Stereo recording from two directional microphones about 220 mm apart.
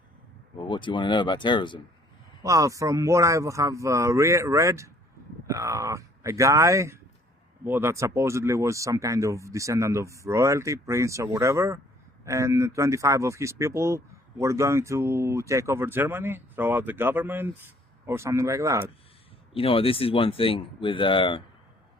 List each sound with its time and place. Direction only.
0.6 s speech: 20° left (ahead or behind)
2.4 s speech: 15° right (ahead or behind)
19.5 s speech: 25° left (ahead or behind)